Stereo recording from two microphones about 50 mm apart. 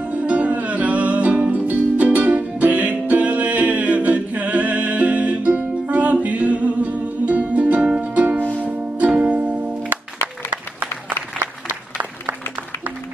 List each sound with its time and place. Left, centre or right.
0.0 s music: right
10.2 s applause: right